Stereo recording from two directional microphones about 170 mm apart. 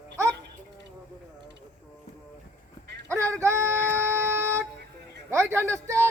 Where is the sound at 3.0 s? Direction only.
15° right (ahead or behind).